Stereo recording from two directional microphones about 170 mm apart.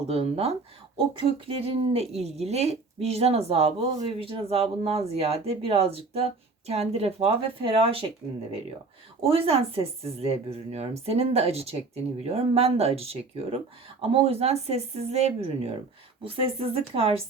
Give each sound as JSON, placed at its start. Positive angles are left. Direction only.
{"t": 0.1, "sound": "speech", "side_deg": -35}
{"t": 9.3, "sound": "speech", "side_deg": -35}